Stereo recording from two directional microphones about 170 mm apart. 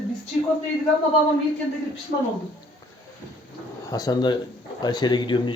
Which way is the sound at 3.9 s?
20° left (ahead or behind).